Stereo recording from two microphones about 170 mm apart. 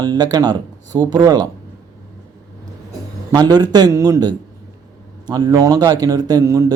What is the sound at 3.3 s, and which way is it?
Speech, 25° right (ahead or behind).